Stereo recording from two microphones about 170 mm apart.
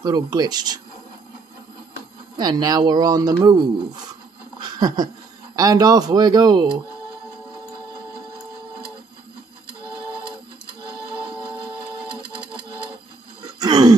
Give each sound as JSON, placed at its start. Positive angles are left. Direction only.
{"t": 0.0, "sound": "speech", "side_deg": -25}
{"t": 2.3, "sound": "speech", "side_deg": -25}
{"t": 13.6, "sound": "a sound", "side_deg": -25}